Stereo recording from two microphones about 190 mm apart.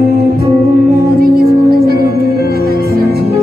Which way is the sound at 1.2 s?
50° right (ahead or behind).